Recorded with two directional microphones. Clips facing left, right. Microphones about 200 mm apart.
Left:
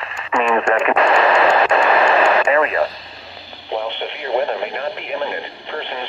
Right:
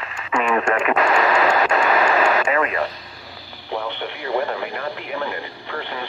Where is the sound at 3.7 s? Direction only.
25° left (ahead or behind).